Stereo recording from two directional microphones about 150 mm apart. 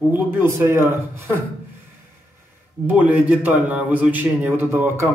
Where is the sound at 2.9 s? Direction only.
10° right (ahead or behind).